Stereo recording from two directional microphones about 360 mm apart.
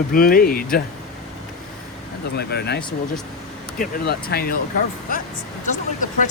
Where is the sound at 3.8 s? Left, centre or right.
Left.